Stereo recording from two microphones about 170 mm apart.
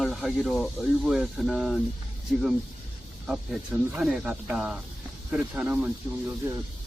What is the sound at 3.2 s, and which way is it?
Speech, 5° right (ahead or behind).